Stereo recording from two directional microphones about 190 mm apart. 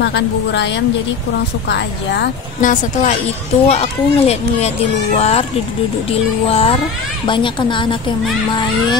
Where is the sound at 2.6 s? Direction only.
40° left (ahead or behind).